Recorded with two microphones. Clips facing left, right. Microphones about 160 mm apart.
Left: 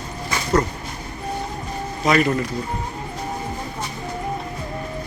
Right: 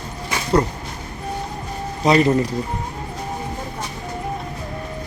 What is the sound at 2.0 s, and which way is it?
Speech, 30° right (ahead or behind).